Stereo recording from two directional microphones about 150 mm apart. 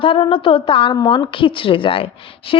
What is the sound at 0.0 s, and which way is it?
A woman's voice, 35° left (ahead or behind).